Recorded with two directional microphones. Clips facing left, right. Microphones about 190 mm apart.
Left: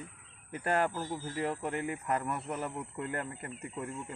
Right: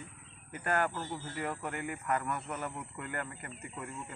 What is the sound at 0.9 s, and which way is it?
Speech, 10° left (ahead or behind).